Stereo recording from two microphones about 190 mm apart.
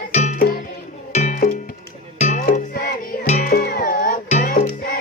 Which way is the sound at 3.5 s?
50° left (ahead or behind).